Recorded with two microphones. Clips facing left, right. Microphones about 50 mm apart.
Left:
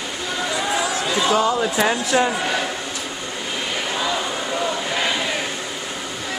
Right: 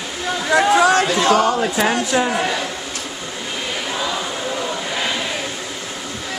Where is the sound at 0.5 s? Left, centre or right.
Right.